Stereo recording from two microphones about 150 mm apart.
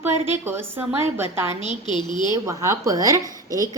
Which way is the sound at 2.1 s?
30° left (ahead or behind).